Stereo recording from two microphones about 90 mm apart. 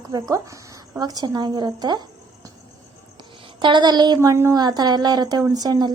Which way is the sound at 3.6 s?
55° right (ahead or behind).